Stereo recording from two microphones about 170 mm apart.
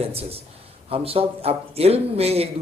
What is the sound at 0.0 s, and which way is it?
A man's voice, 35° right (ahead or behind).